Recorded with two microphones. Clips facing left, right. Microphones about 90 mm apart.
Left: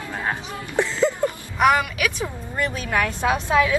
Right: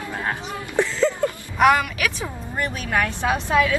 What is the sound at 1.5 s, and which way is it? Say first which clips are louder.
A woman's voice: right 1 dB; centre (ahead or behind).